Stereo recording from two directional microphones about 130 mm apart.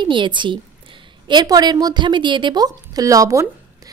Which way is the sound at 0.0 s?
40° right (ahead or behind).